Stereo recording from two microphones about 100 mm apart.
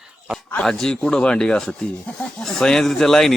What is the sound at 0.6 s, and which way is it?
A woman's voice, 5° left (ahead or behind).